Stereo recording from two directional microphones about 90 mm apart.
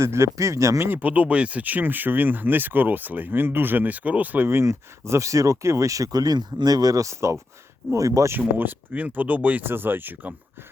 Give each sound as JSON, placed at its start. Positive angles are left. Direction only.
{"t": 0.0, "sound": "speech", "side_deg": -30}
{"t": 0.9, "sound": "speech", "side_deg": -20}
{"t": 8.3, "sound": "speech", "side_deg": -20}